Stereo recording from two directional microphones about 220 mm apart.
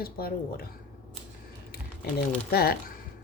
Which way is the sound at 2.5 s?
45° left (ahead or behind).